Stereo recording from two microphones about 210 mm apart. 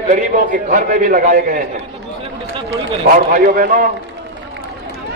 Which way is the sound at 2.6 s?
45° right (ahead or behind).